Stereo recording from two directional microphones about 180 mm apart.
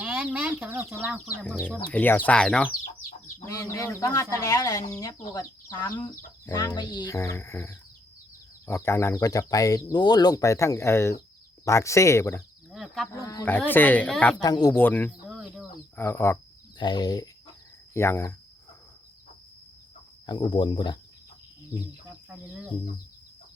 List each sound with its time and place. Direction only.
0.0 s chicken: 5° right (ahead or behind)
1.0 s speech: 5° right (ahead or behind)
1.5 s speech: 5° left (ahead or behind)
3.4 s speech: 15° left (ahead or behind)
12.7 s speech: centre (ahead or behind)
13.1 s speech: 20° left (ahead or behind)
14.4 s speech: 20° left (ahead or behind)
14.8 s speech: 10° left (ahead or behind)
15.4 s chicken: 5° right (ahead or behind)
16.0 s speech: 15° left (ahead or behind)
20.2 s speech: 25° left (ahead or behind)
22.3 s speech: 5° right (ahead or behind)